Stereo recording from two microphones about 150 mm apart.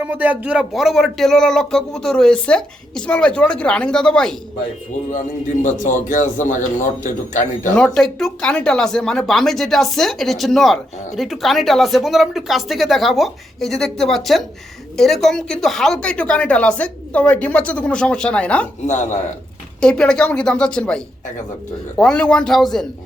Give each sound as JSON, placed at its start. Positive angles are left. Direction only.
{"t": 0.0, "sound": "speech", "side_deg": -10}
{"t": 5.6, "sound": "a man's voice", "side_deg": 60}
{"t": 7.9, "sound": "a woman's voice", "side_deg": 5}
{"t": 19.8, "sound": "speech", "side_deg": 5}